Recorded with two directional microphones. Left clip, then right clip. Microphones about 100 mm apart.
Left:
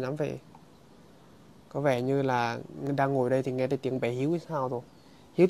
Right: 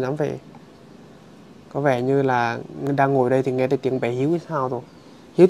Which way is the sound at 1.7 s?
55° left (ahead or behind).